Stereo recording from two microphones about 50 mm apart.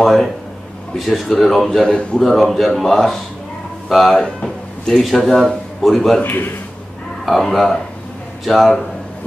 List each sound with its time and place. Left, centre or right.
0.0 s a man's voice: centre
1.8 s a man's voice: centre
2.1 s speech: centre
4.2 s speech: centre
5.0 s speech: centre
6.2 s a man's voice: left
7.4 s speech: centre